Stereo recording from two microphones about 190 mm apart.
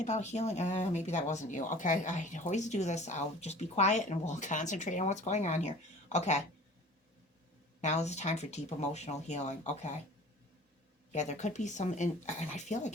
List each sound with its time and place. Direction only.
0.0 s speech: 35° left (ahead or behind)
7.8 s speech: 35° left (ahead or behind)
11.1 s speech: 40° left (ahead or behind)